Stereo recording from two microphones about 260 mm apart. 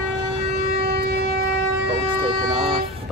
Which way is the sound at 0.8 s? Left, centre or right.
Right.